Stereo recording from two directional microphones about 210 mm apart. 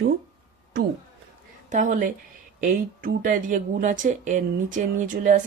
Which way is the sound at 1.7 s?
40° right (ahead or behind).